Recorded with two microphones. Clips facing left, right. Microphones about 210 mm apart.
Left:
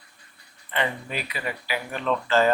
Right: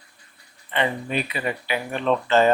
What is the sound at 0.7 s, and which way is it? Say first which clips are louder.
Speech: right 4 dB; 20° right (ahead or behind).